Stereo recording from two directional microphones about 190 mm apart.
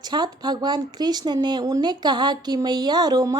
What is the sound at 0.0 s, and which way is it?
Speech, 20° right (ahead or behind).